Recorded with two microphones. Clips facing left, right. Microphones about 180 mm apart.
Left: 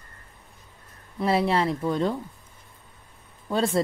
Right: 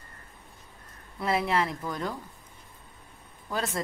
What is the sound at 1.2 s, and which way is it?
Speech, 30° left (ahead or behind).